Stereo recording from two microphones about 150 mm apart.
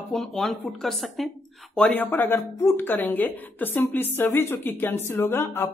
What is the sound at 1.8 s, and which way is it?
Speech, 10° left (ahead or behind).